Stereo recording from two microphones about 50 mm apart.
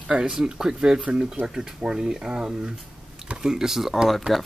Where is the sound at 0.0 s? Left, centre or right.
Centre.